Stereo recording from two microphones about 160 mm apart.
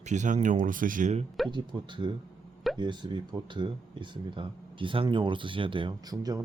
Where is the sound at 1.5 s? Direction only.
30° right (ahead or behind).